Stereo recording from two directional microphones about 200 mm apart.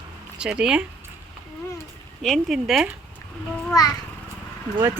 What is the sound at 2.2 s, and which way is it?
Speech, centre (ahead or behind).